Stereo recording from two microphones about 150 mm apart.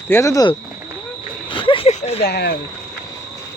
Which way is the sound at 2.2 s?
90° left.